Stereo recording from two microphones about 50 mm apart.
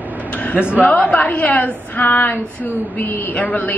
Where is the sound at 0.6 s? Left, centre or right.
Right.